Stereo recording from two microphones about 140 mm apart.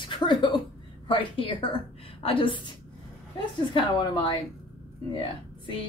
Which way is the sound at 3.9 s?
35° left (ahead or behind).